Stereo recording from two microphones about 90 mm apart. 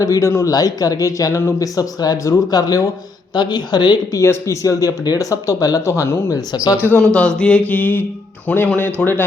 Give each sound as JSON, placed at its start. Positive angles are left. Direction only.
{"t": 0.0, "sound": "speech", "side_deg": 40}
{"t": 0.5, "sound": "speech", "side_deg": 45}
{"t": 4.1, "sound": "speech", "side_deg": 35}
{"t": 6.7, "sound": "speech", "side_deg": -20}
{"t": 7.0, "sound": "speech", "side_deg": 10}
{"t": 7.7, "sound": "music", "side_deg": 20}
{"t": 8.4, "sound": "speech", "side_deg": 15}